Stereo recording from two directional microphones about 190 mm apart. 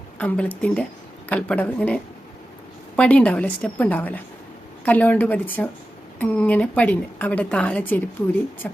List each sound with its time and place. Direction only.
0.2 s a woman's voice: 10° left (ahead or behind)